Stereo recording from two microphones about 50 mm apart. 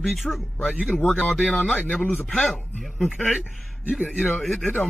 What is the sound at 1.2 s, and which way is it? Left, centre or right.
Speech, centre.